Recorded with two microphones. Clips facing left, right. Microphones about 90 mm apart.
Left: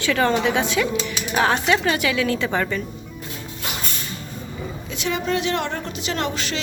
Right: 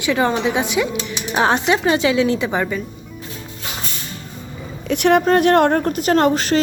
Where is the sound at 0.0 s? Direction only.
20° right (ahead or behind).